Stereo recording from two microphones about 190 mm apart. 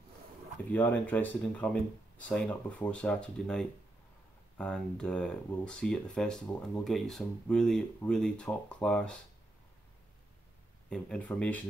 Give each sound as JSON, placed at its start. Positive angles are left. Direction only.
{"t": 0.7, "sound": "speech", "side_deg": 10}
{"t": 10.9, "sound": "speech", "side_deg": 5}